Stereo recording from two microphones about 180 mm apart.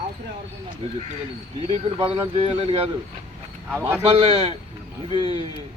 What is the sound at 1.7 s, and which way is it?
Speech, 35° right (ahead or behind).